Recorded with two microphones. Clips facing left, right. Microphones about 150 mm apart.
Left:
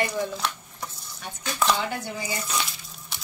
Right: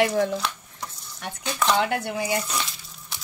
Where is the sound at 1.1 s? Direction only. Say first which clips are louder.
Right 1 dB; 65° right (ahead or behind).